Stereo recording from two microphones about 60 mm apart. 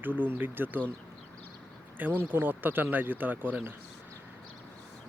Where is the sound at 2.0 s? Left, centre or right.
Right.